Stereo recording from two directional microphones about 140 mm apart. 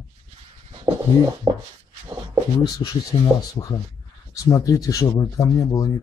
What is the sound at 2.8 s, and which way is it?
Speech, 35° left (ahead or behind).